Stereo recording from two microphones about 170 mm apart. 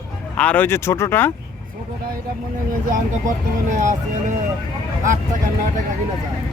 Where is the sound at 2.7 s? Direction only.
50° right (ahead or behind).